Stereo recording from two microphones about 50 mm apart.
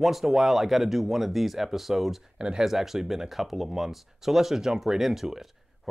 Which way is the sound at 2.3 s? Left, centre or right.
Centre.